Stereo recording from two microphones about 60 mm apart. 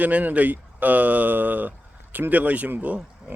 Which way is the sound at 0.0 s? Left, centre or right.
Right.